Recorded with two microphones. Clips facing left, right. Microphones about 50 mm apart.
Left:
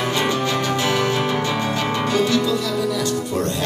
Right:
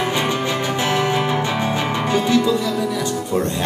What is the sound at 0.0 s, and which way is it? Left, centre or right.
Music, centre.